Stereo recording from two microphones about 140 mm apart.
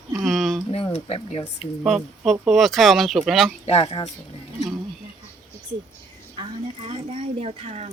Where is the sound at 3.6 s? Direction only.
45° left (ahead or behind).